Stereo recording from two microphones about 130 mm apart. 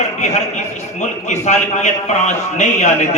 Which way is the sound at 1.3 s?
65° left (ahead or behind).